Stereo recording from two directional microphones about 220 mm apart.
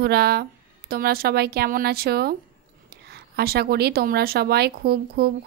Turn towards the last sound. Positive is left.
turn(degrees=-45)  # may be behind; listen again after turning